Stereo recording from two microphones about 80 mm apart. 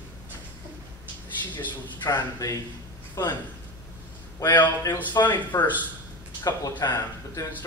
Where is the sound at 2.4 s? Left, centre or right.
Left.